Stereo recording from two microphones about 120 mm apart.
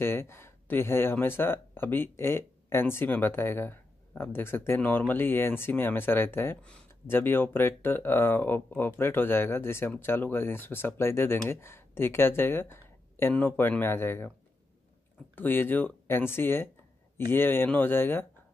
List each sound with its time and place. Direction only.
0.0 s speech: 20° left (ahead or behind)
15.3 s speech: 15° left (ahead or behind)